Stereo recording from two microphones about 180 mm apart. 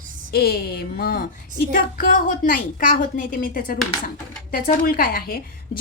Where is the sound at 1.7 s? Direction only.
50° left (ahead or behind).